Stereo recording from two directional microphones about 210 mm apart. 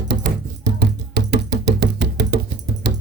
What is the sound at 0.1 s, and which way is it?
Music, 50° right (ahead or behind).